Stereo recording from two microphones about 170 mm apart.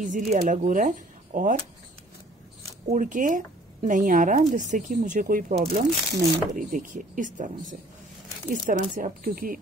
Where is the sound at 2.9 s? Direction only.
50° right (ahead or behind).